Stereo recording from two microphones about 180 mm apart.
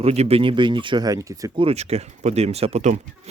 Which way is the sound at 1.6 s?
35° right (ahead or behind).